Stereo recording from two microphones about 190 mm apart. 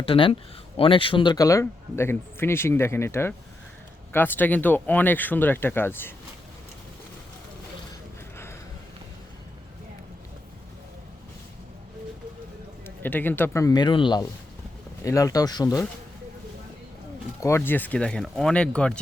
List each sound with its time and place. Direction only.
0.0 s speech: 30° left (ahead or behind); by 6.1 s 10° left (ahead or behind)
12.8 s speech: 10° left (ahead or behind)
17.4 s speech: 10° left (ahead or behind)